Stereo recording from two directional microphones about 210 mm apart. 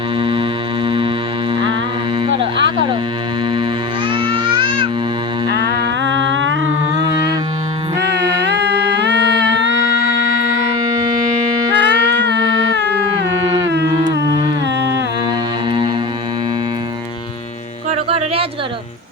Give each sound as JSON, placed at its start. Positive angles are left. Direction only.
{"t": 0.2, "sound": "music", "side_deg": -25}
{"t": 4.1, "sound": "music", "side_deg": -25}
{"t": 6.0, "sound": "music", "side_deg": -60}
{"t": 8.4, "sound": "humming", "side_deg": -55}
{"t": 11.8, "sound": "music", "side_deg": -55}
{"t": 13.9, "sound": "humming", "side_deg": -20}
{"t": 14.8, "sound": "music", "side_deg": -55}
{"t": 17.9, "sound": "music", "side_deg": -30}